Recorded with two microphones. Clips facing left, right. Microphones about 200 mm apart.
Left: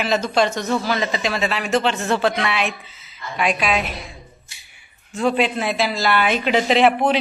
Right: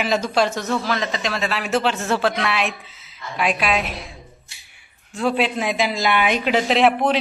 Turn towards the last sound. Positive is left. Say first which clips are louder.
# left 1 dB
turn(degrees=0)  # may be behind; listen again after turning